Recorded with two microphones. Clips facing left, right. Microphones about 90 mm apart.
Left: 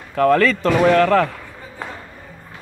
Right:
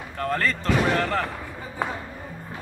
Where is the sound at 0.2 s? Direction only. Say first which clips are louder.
Left 13 dB; 90° left.